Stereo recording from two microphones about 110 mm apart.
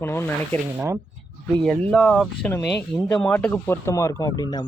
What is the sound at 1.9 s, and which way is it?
Speech, 5° left (ahead or behind).